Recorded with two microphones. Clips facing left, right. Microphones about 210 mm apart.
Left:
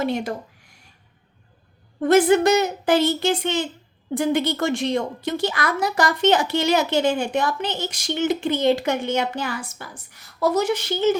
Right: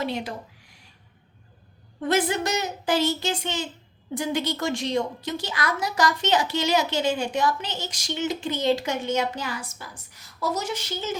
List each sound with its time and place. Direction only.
0.0 s speech: 45° left (ahead or behind)
2.0 s a woman's voice: 50° left (ahead or behind)